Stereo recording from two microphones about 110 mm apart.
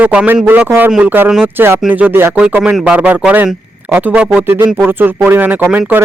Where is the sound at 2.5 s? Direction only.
10° right (ahead or behind).